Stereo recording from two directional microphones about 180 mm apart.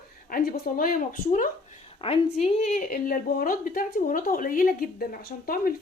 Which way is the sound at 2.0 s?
30° left (ahead or behind).